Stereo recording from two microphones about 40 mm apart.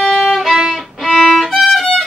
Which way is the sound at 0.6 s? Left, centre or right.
Centre.